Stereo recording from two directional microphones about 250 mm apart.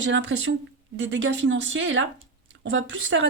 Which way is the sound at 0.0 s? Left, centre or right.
Right.